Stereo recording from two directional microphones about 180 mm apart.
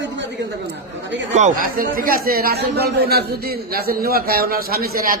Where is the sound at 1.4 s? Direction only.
45° right (ahead or behind).